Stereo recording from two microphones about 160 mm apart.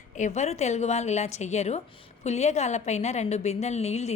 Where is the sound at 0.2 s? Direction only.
45° left (ahead or behind).